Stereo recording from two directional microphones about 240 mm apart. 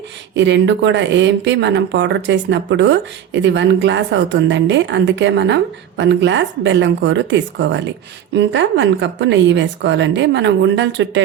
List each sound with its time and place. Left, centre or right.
0.3 s speech: right